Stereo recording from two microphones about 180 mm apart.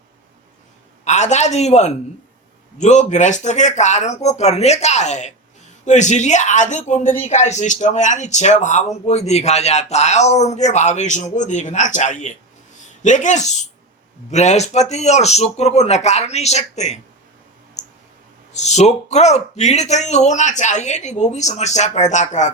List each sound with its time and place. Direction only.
1.0 s speech: 40° left (ahead or behind)
17.8 s clicking: 40° left (ahead or behind)
18.5 s speech: 40° left (ahead or behind)